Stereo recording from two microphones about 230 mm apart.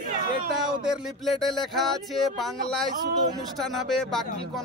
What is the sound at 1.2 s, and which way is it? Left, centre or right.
Speech, centre.